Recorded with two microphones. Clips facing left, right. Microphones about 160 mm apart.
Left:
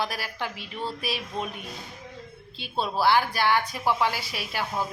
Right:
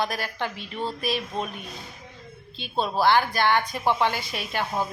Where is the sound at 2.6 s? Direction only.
10° left (ahead or behind).